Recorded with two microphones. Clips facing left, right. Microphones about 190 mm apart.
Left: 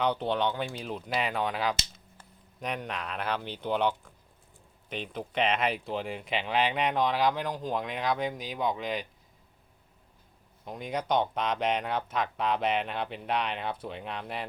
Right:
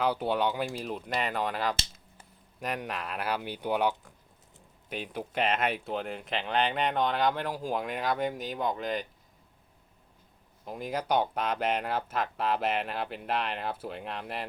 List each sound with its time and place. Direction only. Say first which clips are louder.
0.0 s speech: even; 5° right (ahead or behind)
10.7 s speech: even; 5° right (ahead or behind)